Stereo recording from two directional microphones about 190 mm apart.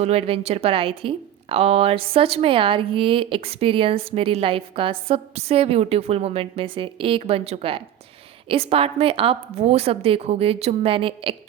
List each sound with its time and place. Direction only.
0.0 s a woman's voice: 30° right (ahead or behind)